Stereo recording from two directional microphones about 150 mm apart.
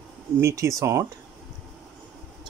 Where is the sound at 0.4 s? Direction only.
20° right (ahead or behind).